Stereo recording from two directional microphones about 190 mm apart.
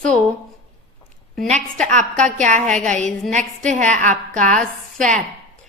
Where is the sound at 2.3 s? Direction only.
40° right (ahead or behind).